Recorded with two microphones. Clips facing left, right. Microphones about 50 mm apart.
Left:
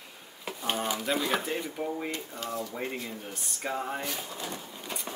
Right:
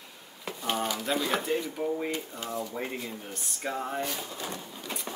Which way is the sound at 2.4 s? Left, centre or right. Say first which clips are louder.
Left 3 dB; centre.